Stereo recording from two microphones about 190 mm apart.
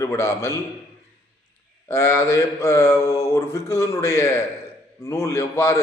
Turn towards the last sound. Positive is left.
turn(degrees=15)  # may be behind; listen again after turning